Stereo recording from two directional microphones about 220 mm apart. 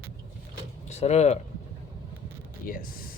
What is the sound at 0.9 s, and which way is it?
Speech, 30° left (ahead or behind).